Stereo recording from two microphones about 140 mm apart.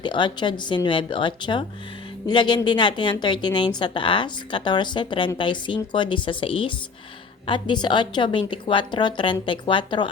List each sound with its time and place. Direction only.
0.0 s speech: 35° left (ahead or behind)